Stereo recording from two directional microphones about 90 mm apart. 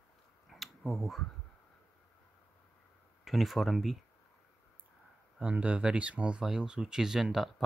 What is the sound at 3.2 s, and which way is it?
Speech, centre (ahead or behind).